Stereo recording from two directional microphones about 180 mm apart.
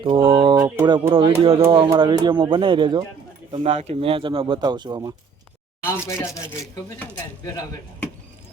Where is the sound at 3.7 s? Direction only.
35° right (ahead or behind).